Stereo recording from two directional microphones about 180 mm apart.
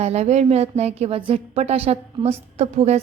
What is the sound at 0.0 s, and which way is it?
A woman's voice, 35° right (ahead or behind).